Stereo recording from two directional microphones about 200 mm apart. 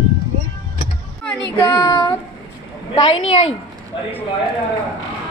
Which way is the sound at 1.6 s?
20° left (ahead or behind).